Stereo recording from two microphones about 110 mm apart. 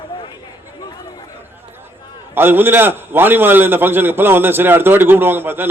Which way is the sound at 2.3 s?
20° right (ahead or behind).